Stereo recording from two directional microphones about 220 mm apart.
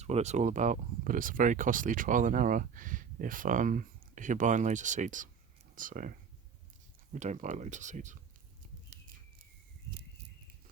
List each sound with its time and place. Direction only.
0.0 s speech: 30° right (ahead or behind)
8.9 s squawk: 40° right (ahead or behind)